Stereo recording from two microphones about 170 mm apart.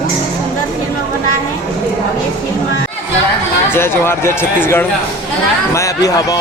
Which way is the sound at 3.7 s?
15° left (ahead or behind).